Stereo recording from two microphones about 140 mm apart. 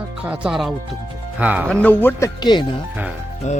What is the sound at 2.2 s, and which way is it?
Speech, 30° left (ahead or behind).